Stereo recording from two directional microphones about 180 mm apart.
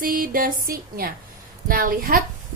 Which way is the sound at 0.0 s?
50° right (ahead or behind).